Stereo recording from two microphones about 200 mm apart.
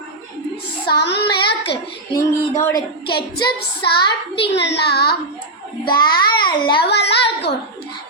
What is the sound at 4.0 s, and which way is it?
Speech, 25° left (ahead or behind).